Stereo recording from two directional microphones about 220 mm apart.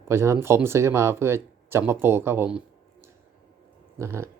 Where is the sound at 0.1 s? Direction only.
10° right (ahead or behind).